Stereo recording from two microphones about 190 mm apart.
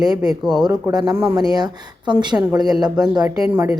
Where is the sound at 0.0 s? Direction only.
20° right (ahead or behind).